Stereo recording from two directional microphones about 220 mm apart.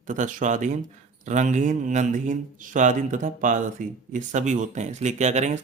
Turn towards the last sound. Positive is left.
turn(degrees=-30)  # may be behind; listen again after turning